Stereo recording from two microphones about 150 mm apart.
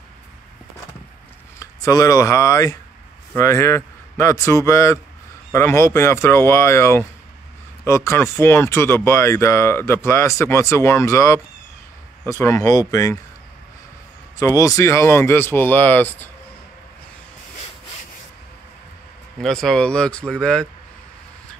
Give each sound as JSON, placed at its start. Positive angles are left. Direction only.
{"t": 1.6, "sound": "speech", "side_deg": 25}
{"t": 14.4, "sound": "speech", "side_deg": 20}
{"t": 19.4, "sound": "speech", "side_deg": 5}